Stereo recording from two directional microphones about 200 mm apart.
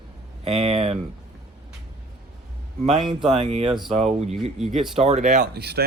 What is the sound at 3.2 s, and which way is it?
Speech, 30° right (ahead or behind).